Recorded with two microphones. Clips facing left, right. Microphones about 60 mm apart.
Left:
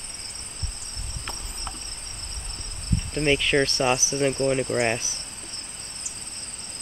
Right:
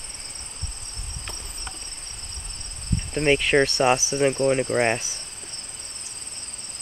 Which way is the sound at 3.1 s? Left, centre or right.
Centre.